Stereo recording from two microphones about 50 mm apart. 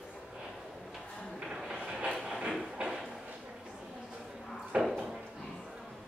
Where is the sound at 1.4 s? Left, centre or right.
Centre.